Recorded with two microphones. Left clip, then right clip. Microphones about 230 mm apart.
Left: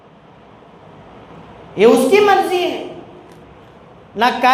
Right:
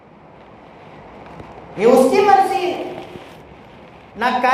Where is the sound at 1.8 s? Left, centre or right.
Left.